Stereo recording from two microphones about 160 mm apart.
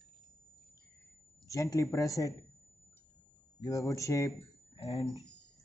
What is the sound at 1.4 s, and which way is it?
Speech, 20° left (ahead or behind).